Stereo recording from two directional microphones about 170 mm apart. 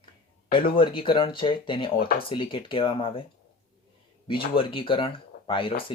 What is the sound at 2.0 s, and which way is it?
Speech, 60° left (ahead or behind).